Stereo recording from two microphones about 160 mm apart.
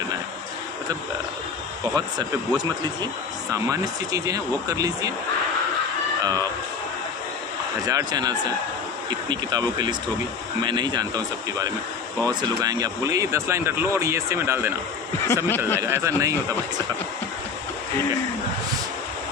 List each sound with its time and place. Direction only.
2.0 s speech: 25° right (ahead or behind)
6.2 s speech: 25° right (ahead or behind)
7.9 s speech: 25° right (ahead or behind)
12.2 s speech: 25° right (ahead or behind)
15.4 s speech: 15° left (ahead or behind)
15.8 s speech: 20° right (ahead or behind)